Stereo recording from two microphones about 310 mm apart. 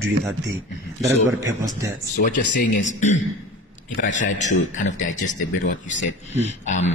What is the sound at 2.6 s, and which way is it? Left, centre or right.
Speech, left.